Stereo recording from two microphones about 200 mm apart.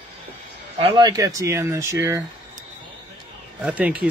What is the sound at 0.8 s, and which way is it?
Speech, 25° right (ahead or behind).